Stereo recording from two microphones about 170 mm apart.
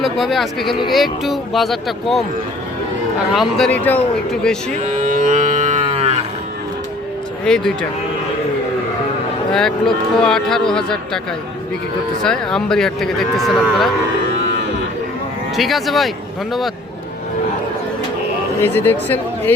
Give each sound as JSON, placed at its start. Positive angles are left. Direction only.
{"t": 0.0, "sound": "speech", "side_deg": 0}
{"t": 0.6, "sound": "speech", "side_deg": 30}
{"t": 0.9, "sound": "speech", "side_deg": 0}
{"t": 3.3, "sound": "speech", "side_deg": 5}
{"t": 4.7, "sound": "cattle", "side_deg": -50}
{"t": 7.4, "sound": "speech", "side_deg": 5}
{"t": 9.5, "sound": "speech", "side_deg": 5}
{"t": 12.2, "sound": "speech", "side_deg": 5}
{"t": 15.5, "sound": "speech", "side_deg": 0}
{"t": 18.6, "sound": "speech", "side_deg": 10}